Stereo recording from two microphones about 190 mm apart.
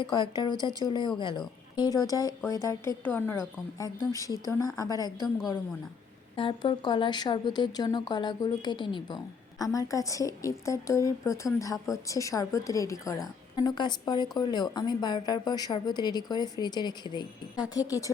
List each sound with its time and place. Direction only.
0.0 s speech: 25° left (ahead or behind)
0.5 s speech: 20° right (ahead or behind)
0.9 s speech: 25° left (ahead or behind)
6.3 s speech: 25° left (ahead or behind)